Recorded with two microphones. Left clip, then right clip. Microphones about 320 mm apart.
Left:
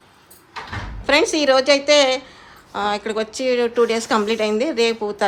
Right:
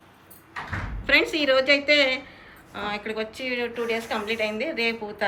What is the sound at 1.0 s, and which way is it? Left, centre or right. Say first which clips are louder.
A woman's voice: left 5 dB; centre.